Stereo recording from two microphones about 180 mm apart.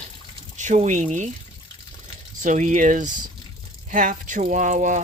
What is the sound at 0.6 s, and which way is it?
Speech, 45° right (ahead or behind).